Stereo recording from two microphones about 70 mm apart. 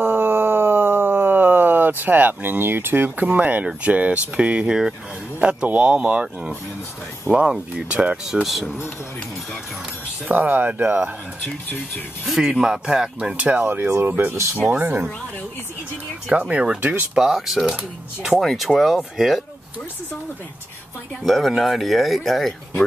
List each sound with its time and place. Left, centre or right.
0.0 s howl: right
3.6 s speech: centre
8.3 s speech: centre
10.2 s speech: right
12.3 s speech: centre; by 15.0 s right
16.3 s speech: centre
17.2 s speech: centre
21.2 s speech: centre